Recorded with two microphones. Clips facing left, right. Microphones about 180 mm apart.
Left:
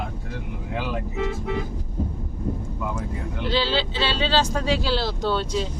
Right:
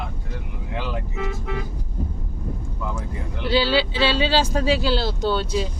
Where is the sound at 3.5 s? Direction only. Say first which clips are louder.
Right 4 dB; 10° right (ahead or behind).